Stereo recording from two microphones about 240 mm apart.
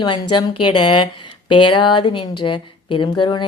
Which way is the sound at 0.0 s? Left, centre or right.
Centre.